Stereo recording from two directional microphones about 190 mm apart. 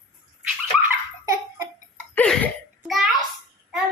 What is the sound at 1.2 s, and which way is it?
Belly laugh, 15° right (ahead or behind).